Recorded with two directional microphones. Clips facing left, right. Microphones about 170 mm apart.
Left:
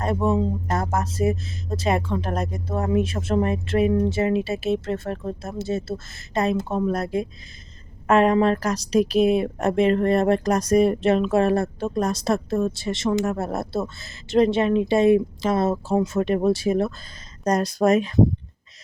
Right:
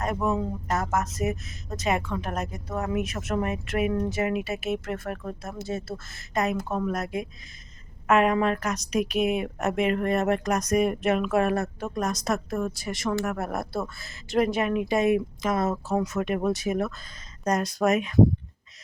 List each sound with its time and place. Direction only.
0.0 s a woman's voice: 30° left (ahead or behind)